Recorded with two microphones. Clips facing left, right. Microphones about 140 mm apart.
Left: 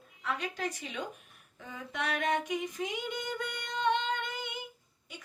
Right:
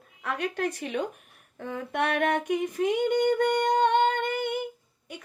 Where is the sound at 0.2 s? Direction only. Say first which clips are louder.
Right 6 dB; 60° right (ahead or behind).